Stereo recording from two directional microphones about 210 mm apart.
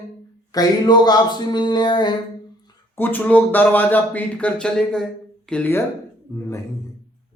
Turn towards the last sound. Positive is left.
turn(degrees=10)  # may be behind; listen again after turning